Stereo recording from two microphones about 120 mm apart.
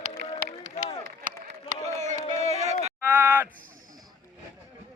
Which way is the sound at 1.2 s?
85° right.